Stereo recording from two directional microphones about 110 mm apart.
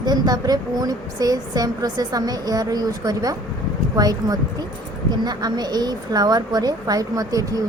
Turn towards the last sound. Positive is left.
turn(degrees=-30)  # may be behind; listen again after turning